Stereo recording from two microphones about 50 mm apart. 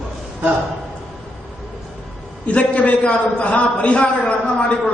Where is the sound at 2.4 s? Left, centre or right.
Left.